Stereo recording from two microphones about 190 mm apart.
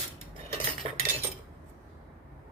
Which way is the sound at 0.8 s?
30° right (ahead or behind).